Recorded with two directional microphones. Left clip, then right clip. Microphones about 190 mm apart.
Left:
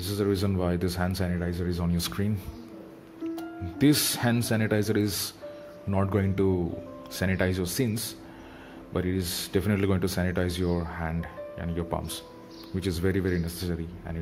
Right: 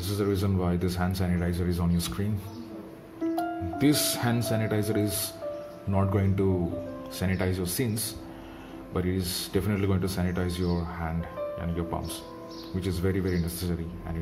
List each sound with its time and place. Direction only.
0.0 s speech: 20° left (ahead or behind)
2.0 s speech: 30° left (ahead or behind)
3.3 s speech: 30° left (ahead or behind)